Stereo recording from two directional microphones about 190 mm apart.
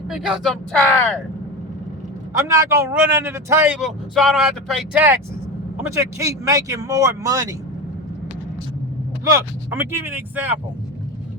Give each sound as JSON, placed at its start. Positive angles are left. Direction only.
{"t": 0.1, "sound": "speech", "side_deg": 0}
{"t": 2.5, "sound": "speech", "side_deg": -15}
{"t": 4.9, "sound": "speech", "side_deg": -10}
{"t": 9.3, "sound": "speech", "side_deg": -15}